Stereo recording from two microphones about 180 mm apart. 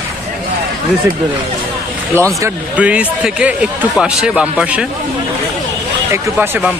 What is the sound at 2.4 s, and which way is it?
Speech, 5° right (ahead or behind).